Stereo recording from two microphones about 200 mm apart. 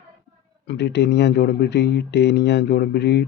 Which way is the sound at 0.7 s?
60° left (ahead or behind).